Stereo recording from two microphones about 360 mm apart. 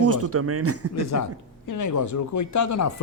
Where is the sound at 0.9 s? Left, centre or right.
Left.